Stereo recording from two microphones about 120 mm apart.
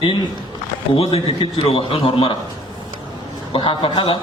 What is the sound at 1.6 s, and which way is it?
Speech, 50° left (ahead or behind).